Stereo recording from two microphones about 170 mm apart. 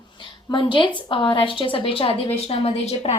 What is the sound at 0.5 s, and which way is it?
A woman's voice, 30° left (ahead or behind).